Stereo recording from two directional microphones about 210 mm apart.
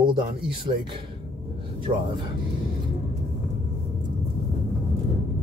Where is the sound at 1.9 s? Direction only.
30° right (ahead or behind).